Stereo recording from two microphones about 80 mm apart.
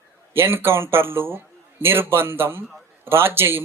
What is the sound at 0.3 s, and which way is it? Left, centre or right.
Speech, right.